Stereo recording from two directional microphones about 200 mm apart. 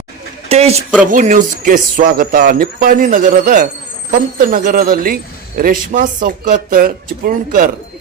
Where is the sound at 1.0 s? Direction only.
40° right (ahead or behind).